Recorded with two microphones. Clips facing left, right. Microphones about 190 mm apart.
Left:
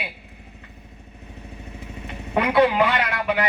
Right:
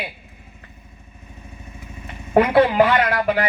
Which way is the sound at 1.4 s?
65° left (ahead or behind).